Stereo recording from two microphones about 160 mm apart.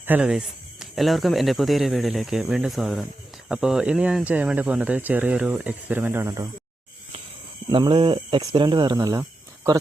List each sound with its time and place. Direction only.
0.0 s speech: 10° right (ahead or behind)
7.7 s speech: 30° right (ahead or behind)